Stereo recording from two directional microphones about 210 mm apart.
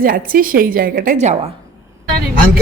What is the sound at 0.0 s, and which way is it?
A woman's voice, 40° right (ahead or behind).